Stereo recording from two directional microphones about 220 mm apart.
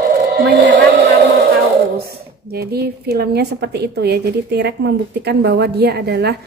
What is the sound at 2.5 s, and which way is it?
A woman's voice, 45° right (ahead or behind).